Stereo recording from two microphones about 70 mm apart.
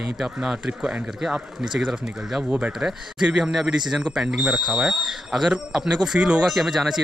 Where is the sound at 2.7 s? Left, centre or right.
Centre.